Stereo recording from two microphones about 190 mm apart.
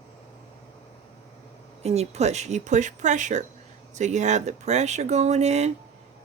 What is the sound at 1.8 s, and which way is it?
Speech, 35° right (ahead or behind).